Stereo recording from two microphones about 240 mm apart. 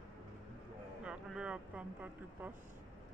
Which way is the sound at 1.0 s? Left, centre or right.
Centre.